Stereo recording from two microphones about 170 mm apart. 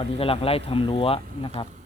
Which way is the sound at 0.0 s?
35° left (ahead or behind).